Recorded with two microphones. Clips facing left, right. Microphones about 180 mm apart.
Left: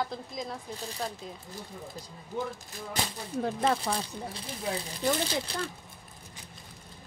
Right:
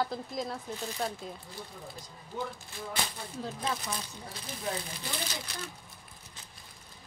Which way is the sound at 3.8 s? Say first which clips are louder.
Left 7 dB; 30° left (ahead or behind).